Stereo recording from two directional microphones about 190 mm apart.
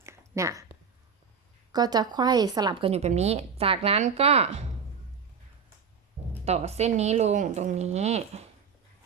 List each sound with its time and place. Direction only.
0.0 s a sound: 15° right (ahead or behind)
1.7 s a woman's voice: 20° right (ahead or behind)
2.9 s speech: 35° right (ahead or behind)
6.4 s speech: 35° right (ahead or behind)